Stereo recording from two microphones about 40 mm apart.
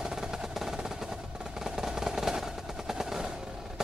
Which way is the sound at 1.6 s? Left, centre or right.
Centre.